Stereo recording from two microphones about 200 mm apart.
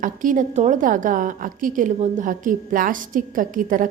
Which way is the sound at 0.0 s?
40° right (ahead or behind).